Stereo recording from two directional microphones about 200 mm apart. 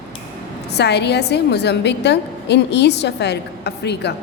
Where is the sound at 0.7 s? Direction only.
55° left (ahead or behind).